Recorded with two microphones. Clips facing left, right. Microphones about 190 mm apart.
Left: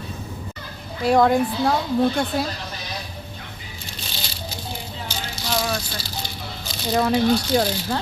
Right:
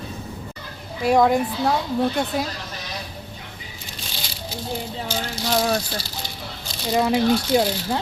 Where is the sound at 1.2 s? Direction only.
5° right (ahead or behind).